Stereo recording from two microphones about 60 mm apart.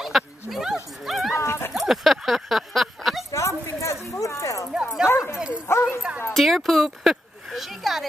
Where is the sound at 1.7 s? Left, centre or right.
Centre.